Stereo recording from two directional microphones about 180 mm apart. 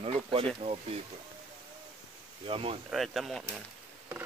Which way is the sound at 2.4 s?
30° right (ahead or behind).